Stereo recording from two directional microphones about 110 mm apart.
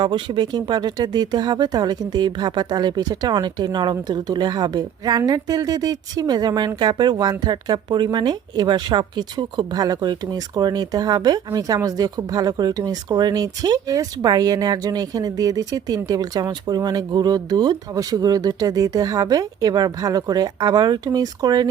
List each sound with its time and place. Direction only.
0.0 s speech: 45° right (ahead or behind)